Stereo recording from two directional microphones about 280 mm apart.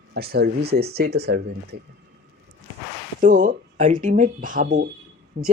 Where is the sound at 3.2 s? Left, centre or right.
Right.